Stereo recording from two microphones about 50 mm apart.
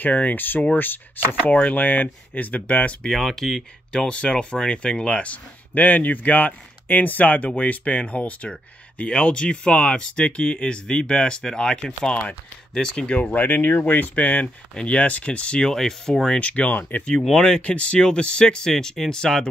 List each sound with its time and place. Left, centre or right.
0.0 s speech: left
3.1 s speech: centre
4.1 s speech: left
13.3 s speech: left
14.1 s speech: left
15.7 s speech: centre
16.3 s speech: left
17.4 s speech: left